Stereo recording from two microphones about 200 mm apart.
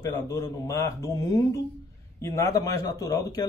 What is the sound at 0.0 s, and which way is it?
Speech, 15° left (ahead or behind).